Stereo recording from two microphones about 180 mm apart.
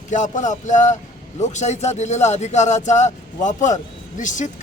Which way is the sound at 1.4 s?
40° left (ahead or behind).